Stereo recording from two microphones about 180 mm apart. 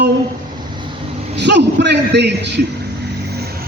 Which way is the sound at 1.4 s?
70° right (ahead or behind).